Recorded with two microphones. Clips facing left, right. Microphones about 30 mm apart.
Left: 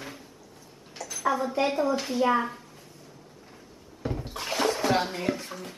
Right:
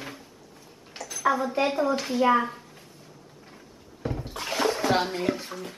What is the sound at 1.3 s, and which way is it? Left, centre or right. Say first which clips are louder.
Speech: even; centre.